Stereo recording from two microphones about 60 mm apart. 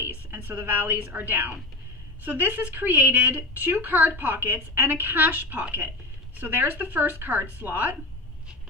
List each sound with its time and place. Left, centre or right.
0.0 s a woman's voice: right